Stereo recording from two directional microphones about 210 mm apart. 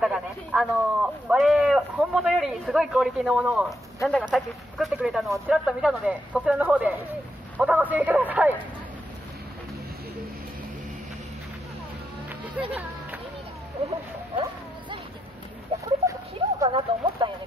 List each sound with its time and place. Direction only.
0.0 s a man's voice: 5° right (ahead or behind)
12.3 s music: 10° right (ahead or behind)
16.1 s dog: 20° right (ahead or behind)